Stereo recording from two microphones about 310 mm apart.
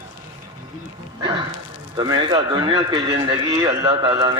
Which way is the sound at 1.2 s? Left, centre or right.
Centre.